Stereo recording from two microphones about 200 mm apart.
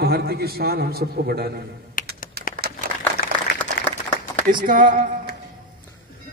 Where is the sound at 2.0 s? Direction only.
45° left (ahead or behind).